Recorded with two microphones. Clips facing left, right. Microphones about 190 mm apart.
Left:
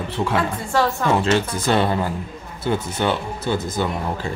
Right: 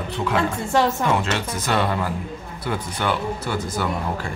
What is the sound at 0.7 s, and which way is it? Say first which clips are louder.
Speech: even; 20° right (ahead or behind).